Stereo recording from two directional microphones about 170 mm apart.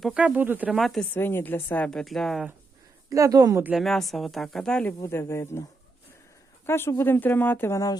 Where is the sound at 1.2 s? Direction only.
15° left (ahead or behind).